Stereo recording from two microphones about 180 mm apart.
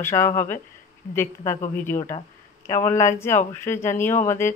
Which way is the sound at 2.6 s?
15° left (ahead or behind).